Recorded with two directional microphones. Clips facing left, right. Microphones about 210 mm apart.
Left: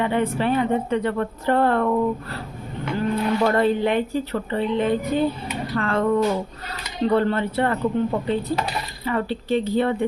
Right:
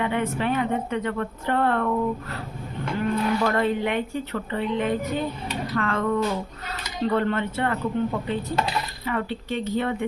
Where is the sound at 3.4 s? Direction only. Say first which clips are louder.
Left 4 dB; 30° left (ahead or behind).